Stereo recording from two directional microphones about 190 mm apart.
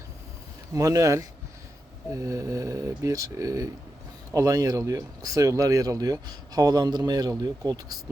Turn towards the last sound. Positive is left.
turn(degrees=-20)  # may be behind; listen again after turning